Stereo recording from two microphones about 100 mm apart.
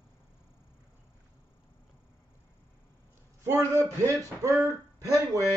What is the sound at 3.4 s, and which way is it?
A man's voice, 30° right (ahead or behind).